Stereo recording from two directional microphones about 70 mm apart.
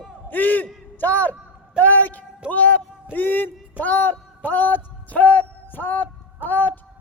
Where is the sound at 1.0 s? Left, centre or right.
Left.